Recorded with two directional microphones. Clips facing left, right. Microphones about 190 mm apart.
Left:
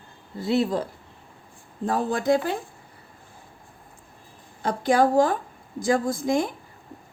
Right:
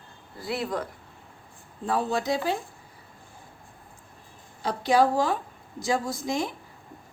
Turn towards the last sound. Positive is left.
turn(degrees=50)  # may be behind; listen again after turning